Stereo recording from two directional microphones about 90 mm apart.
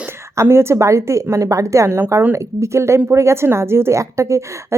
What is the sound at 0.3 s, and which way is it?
A woman's voice, 30° right (ahead or behind).